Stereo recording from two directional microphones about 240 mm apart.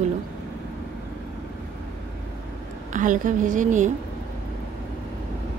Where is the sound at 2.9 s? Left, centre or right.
Right.